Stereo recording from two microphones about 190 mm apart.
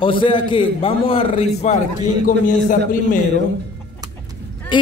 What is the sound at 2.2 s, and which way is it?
Speech, 45° left (ahead or behind).